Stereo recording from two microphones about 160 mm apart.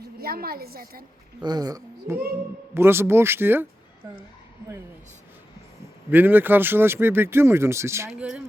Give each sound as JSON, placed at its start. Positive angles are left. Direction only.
{"t": 0.2, "sound": "a woman's voice", "side_deg": -70}
{"t": 1.4, "sound": "speech", "side_deg": -25}
{"t": 6.1, "sound": "speech", "side_deg": -10}